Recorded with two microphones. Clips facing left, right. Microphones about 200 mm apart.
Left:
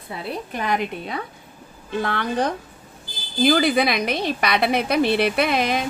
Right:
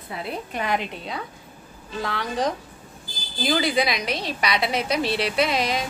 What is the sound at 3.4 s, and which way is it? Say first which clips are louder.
A woman's voice: left 5 dB; 55° left (ahead or behind).